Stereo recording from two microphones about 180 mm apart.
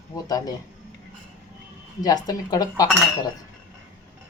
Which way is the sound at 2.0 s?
20° left (ahead or behind).